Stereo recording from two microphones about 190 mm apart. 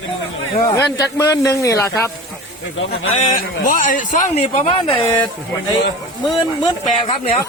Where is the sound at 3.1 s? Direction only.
40° left (ahead or behind).